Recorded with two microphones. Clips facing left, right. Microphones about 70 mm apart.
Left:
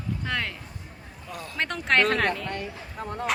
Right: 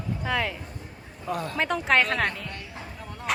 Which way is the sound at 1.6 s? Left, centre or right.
Centre.